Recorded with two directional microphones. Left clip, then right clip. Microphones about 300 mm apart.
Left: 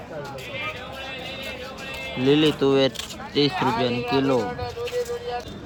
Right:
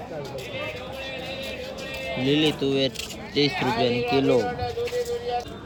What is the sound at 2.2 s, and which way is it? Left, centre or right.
Speech, centre.